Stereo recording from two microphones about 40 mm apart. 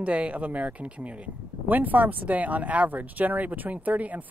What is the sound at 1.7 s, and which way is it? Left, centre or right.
Speech, right.